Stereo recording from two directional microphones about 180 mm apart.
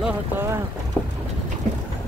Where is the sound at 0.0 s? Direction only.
10° right (ahead or behind).